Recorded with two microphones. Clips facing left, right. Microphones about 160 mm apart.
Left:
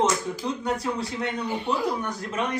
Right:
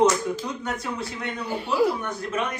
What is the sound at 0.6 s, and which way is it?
Speech, 35° left (ahead or behind).